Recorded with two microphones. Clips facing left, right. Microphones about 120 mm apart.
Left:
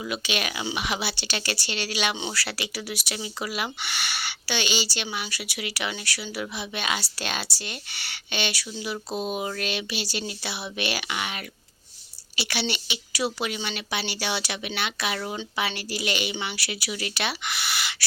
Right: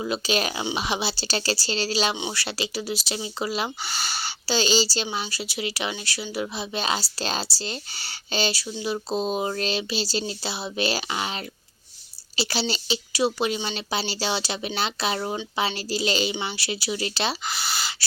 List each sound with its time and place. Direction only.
0.0 s speech: 35° right (ahead or behind)
2.1 s speech: 20° right (ahead or behind)